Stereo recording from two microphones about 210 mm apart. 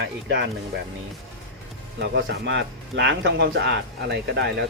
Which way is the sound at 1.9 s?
55° right (ahead or behind).